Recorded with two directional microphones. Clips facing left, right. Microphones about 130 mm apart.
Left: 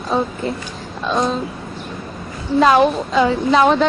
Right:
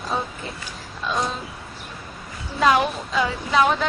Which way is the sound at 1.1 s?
30° left (ahead or behind).